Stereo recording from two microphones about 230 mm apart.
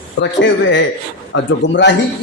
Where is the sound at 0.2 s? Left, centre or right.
Left.